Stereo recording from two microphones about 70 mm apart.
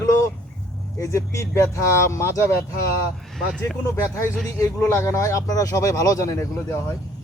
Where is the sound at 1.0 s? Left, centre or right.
Left.